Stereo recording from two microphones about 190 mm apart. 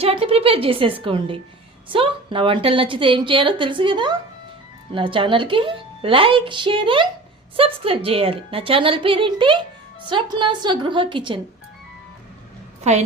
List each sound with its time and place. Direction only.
0.0 s a woman's voice: 30° right (ahead or behind)
12.9 s a woman's voice: 35° right (ahead or behind)